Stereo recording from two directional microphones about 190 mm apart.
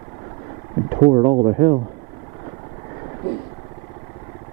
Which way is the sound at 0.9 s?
25° right (ahead or behind).